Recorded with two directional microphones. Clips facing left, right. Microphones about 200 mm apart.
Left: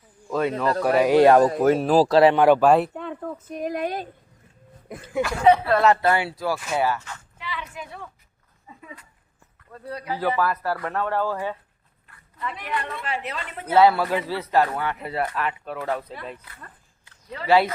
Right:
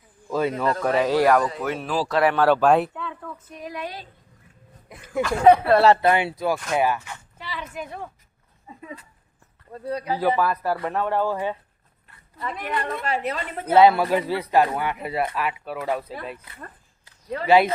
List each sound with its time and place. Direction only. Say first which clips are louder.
0.3 s a man's voice: even; centre (ahead or behind); by 1.5 s 25° left (ahead or behind)
1.5 s speech: left 8 dB; 45° left (ahead or behind)
2.3 s a man's voice: left 3 dB; 15° left (ahead or behind)
2.6 s speech: left 1 dB; centre (ahead or behind)
2.9 s speech: left 3 dB; 45° left (ahead or behind)
5.7 s speech: right 3 dB; 30° right (ahead or behind)
6.0 s speech: right 2 dB; 20° right (ahead or behind)
7.3 s a sound: right 2 dB; 35° right (ahead or behind)
9.7 s speech: right 4 dB; 25° right (ahead or behind)
12.4 s a woman's voice: right 2 dB; 40° right (ahead or behind)
13.7 s speech: right 2 dB; 20° right (ahead or behind)
16.6 s a sound: right 5 dB; 45° right (ahead or behind)
17.4 s speech: right 2 dB; 15° right (ahead or behind)